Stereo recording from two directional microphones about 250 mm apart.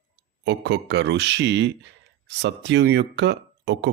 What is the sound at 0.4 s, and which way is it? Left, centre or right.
Speech, right.